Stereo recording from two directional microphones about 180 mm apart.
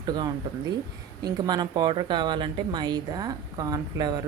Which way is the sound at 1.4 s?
20° right (ahead or behind).